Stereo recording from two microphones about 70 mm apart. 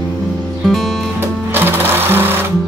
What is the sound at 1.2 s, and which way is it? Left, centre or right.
Sewing machine, right.